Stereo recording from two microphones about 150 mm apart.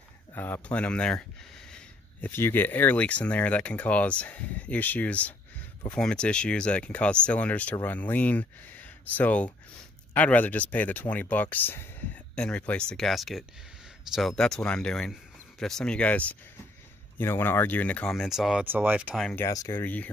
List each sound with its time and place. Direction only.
0.3 s speech: 15° left (ahead or behind)
2.2 s speech: 15° left (ahead or behind); by 19.1 s 10° right (ahead or behind)
19.3 s speech: 20° left (ahead or behind)
19.8 s speech: 10° left (ahead or behind)